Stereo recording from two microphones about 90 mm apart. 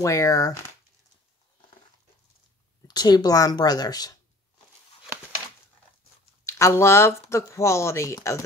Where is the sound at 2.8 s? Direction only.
50° left (ahead or behind).